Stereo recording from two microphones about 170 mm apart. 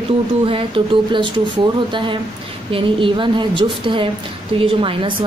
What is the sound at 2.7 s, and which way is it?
A woman's voice, 30° right (ahead or behind).